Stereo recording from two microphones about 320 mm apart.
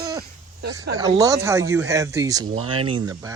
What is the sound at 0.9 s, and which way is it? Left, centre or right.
Speech, centre.